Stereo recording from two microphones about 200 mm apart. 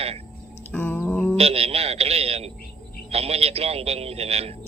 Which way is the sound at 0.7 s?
10° left (ahead or behind).